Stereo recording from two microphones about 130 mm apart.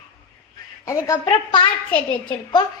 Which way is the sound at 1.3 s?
40° left (ahead or behind).